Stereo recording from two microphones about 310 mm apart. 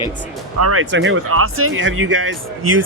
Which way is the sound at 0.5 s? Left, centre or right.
Right.